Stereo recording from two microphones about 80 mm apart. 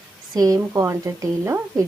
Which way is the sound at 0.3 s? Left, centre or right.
Right.